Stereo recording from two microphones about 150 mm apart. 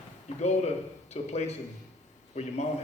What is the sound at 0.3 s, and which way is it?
A man's voice, 45° left (ahead or behind).